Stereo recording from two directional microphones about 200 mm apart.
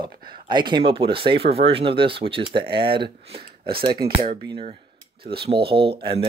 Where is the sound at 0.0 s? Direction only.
20° right (ahead or behind).